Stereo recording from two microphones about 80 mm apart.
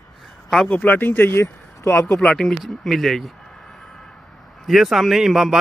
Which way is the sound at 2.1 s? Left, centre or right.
Centre.